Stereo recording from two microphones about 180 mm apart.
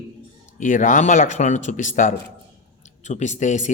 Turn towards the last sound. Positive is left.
turn(degrees=40)  # may be behind; listen again after turning